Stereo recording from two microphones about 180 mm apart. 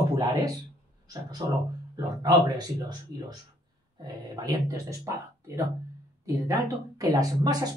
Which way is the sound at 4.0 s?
20° right (ahead or behind).